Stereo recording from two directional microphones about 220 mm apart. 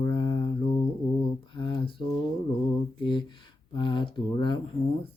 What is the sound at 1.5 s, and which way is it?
Speech, 20° left (ahead or behind).